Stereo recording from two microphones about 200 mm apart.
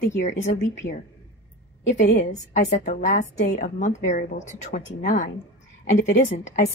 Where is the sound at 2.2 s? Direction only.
35° left (ahead or behind).